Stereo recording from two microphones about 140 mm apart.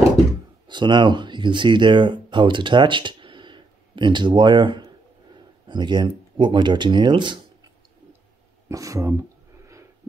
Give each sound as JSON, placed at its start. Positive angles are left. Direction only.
{"t": 0.7, "sound": "speech", "side_deg": -35}
{"t": 8.6, "sound": "speech", "side_deg": -25}